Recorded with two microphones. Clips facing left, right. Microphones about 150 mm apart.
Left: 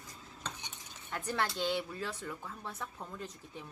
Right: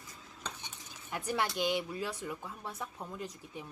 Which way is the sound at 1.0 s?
10° right (ahead or behind).